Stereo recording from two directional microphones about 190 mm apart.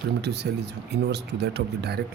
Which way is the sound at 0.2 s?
60° right (ahead or behind).